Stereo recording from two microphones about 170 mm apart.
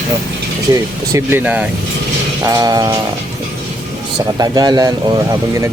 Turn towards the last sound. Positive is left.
turn(degrees=-20)  # may be behind; listen again after turning